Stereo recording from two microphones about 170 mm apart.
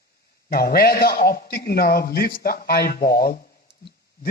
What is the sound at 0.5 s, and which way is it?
A man's voice, 60° left (ahead or behind).